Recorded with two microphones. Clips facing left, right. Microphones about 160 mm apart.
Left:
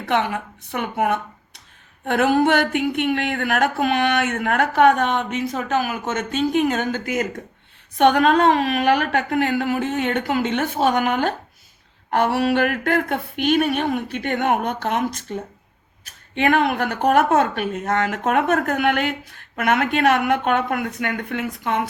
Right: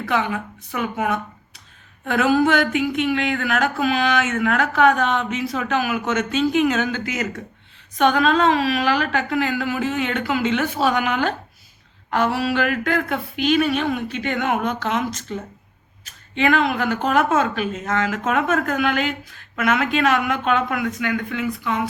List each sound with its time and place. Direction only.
0.7 s a woman's voice: 60° left (ahead or behind)